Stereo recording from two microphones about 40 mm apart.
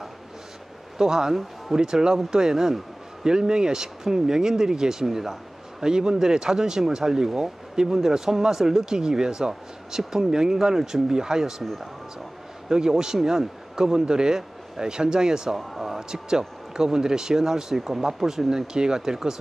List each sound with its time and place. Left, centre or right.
0.9 s speech: centre
12.6 s speech: centre
15.5 s speech: centre
16.1 s speech: centre